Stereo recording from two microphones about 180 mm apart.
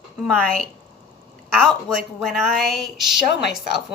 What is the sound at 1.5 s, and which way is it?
A woman's voice, centre (ahead or behind).